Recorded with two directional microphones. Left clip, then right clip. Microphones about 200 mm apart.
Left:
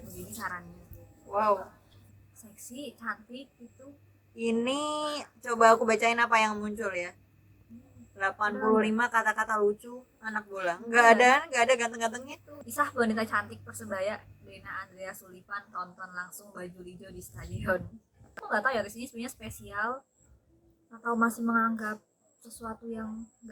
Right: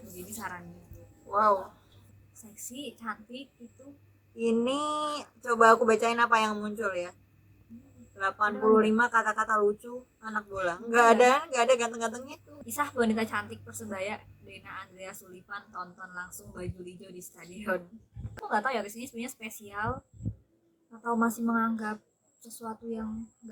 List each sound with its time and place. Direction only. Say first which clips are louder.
0.3 s a woman's voice: left 3 dB; 20° right (ahead or behind)
0.7 s a sound: right 1 dB; centre (ahead or behind)
3.0 s a woman's voice: left 3 dB; 20° right (ahead or behind)
4.4 s a man's voice: right 2 dB; 5° left (ahead or behind)
12.6 s a woman's voice: left 1 dB; 20° right (ahead or behind)